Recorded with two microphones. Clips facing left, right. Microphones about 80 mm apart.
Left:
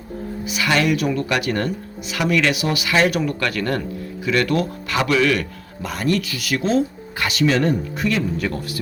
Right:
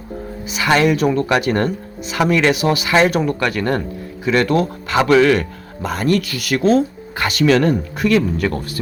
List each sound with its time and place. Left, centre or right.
0.5 s speech: right
7.4 s speech: right